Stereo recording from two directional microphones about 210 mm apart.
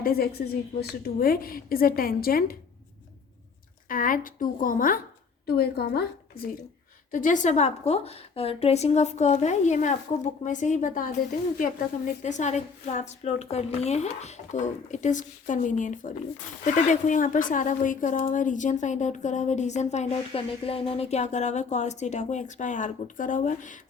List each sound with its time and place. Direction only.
0.0 s a woman's voice: 45° left (ahead or behind)
3.8 s a woman's voice: 40° left (ahead or behind)
7.1 s a woman's voice: 40° left (ahead or behind)